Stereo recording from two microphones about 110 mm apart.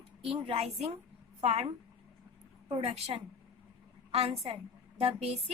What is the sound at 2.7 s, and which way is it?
A woman's voice, 60° right (ahead or behind).